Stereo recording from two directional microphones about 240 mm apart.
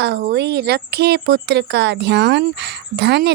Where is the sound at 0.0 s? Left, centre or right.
Right.